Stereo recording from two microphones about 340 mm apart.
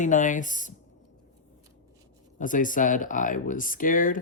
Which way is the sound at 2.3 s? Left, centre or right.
Left.